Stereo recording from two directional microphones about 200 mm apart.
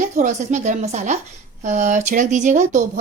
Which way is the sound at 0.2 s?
35° right (ahead or behind).